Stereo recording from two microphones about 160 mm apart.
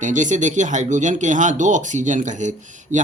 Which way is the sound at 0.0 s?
50° right (ahead or behind).